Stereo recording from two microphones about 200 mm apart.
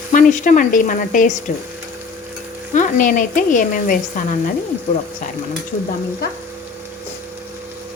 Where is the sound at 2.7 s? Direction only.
40° left (ahead or behind).